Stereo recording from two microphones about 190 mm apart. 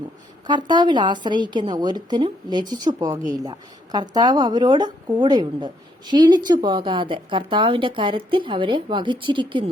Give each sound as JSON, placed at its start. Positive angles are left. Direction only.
{"t": 0.4, "sound": "a woman's voice", "side_deg": -25}